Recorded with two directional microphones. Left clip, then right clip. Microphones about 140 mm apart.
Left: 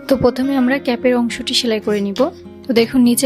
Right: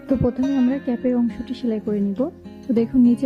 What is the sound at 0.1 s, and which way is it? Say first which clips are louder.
Speech: left 7 dB; 40° left (ahead or behind).